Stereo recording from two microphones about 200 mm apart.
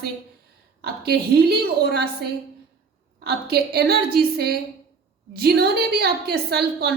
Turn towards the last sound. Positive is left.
turn(degrees=-50)  # may be behind; listen again after turning